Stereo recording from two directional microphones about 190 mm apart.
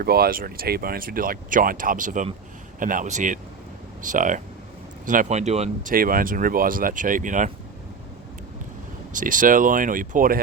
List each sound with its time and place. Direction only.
0.0 s speech: 55° right (ahead or behind); by 5.9 s 35° right (ahead or behind)
5.9 s speech: 50° right (ahead or behind)
9.1 s speech: 45° right (ahead or behind)